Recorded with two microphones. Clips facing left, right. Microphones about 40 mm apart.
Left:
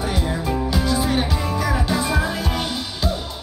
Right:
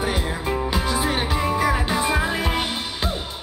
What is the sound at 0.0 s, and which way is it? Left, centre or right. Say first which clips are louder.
Music: left 1 dB; centre.